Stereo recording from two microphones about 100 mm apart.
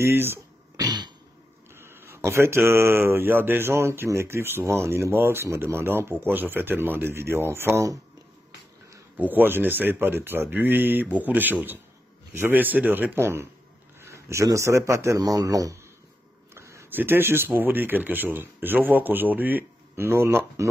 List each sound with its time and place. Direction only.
0.0 s speech: 25° right (ahead or behind)
0.7 s cough: 45° right (ahead or behind)
1.8 s speech: 25° right (ahead or behind)
9.1 s speech: 20° right (ahead or behind); by 15.8 s 35° right (ahead or behind)
16.5 s a sound: 30° right (ahead or behind)
16.9 s speech: 20° right (ahead or behind)